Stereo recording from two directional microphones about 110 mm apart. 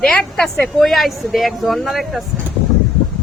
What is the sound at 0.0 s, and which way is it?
Speech, 5° left (ahead or behind).